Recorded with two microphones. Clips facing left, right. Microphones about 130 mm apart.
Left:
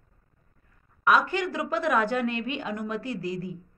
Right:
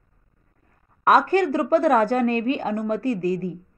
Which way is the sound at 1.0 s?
45° right (ahead or behind).